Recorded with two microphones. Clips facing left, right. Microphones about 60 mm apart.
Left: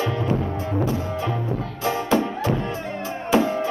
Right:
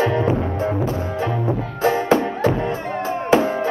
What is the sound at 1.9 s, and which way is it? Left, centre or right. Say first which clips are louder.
Music: right 4 dB; right.